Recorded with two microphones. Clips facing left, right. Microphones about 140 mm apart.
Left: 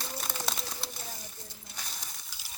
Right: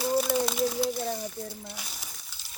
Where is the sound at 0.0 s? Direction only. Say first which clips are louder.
Right 12 dB; 5° right (ahead or behind).